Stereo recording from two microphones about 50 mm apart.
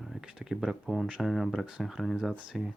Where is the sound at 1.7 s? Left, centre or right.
Centre.